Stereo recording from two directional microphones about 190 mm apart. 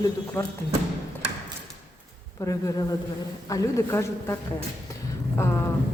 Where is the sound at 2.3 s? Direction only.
15° left (ahead or behind).